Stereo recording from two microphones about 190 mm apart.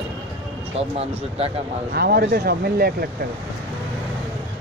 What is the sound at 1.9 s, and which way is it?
Speech, 55° right (ahead or behind).